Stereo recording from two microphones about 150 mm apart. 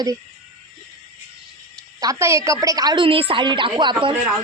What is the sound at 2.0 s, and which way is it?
A woman's voice, 20° right (ahead or behind).